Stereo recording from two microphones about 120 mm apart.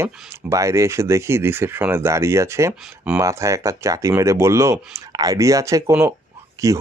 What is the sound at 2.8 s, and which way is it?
Speech, 5° right (ahead or behind).